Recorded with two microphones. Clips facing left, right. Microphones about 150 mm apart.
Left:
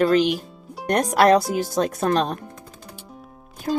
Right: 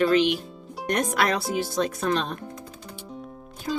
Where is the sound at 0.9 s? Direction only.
40° left (ahead or behind).